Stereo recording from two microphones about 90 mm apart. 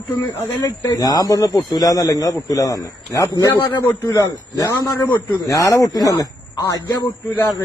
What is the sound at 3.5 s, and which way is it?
Speech, 60° left (ahead or behind).